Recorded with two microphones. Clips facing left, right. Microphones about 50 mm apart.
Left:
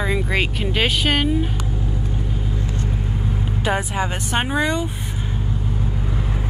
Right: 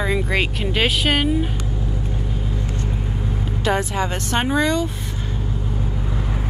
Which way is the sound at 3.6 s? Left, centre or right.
Centre.